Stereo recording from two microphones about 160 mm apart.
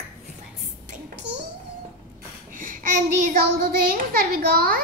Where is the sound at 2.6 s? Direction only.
55° right (ahead or behind).